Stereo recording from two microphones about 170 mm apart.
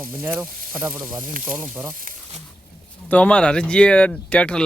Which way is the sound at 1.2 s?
50° right (ahead or behind).